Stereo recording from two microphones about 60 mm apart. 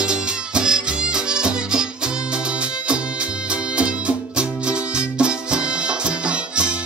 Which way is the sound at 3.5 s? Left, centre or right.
Centre.